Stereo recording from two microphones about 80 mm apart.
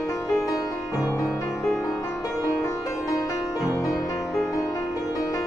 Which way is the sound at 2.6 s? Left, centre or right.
Left.